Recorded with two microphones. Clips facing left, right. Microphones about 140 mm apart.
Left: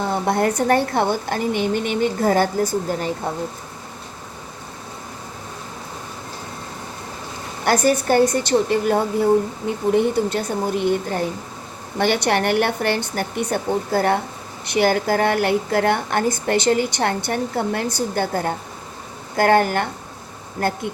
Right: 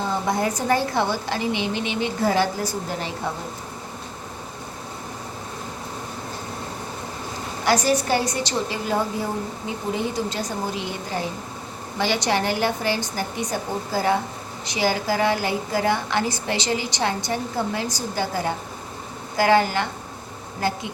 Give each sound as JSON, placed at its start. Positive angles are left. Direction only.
{"t": 0.1, "sound": "a woman's voice", "side_deg": 60}
{"t": 7.6, "sound": "a woman's voice", "side_deg": 50}